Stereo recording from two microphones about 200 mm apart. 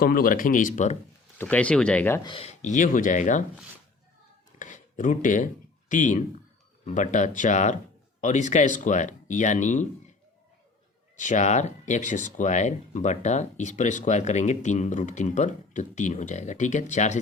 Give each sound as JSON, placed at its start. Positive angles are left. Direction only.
{"t": 0.0, "sound": "speech", "side_deg": 45}
{"t": 1.4, "sound": "speech", "side_deg": 5}
{"t": 2.2, "sound": "speech", "side_deg": 30}
{"t": 4.6, "sound": "a sound", "side_deg": 40}
{"t": 5.9, "sound": "speech", "side_deg": 40}
{"t": 11.2, "sound": "speech", "side_deg": 35}